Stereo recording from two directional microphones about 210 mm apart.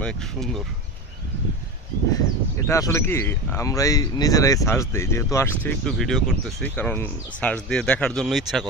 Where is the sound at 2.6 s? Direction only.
15° left (ahead or behind).